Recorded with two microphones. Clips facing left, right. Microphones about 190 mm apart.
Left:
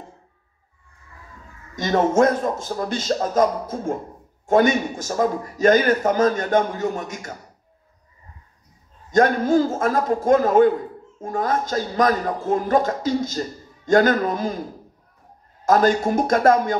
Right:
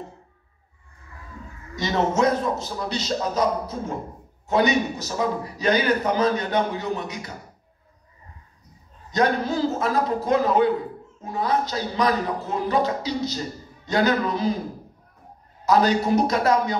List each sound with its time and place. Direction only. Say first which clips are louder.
1.8 s a man's voice: left 4 dB; 50° left (ahead or behind)
9.1 s a man's voice: left 5 dB; 50° left (ahead or behind)
15.6 s a man's voice: left 2 dB; 50° left (ahead or behind)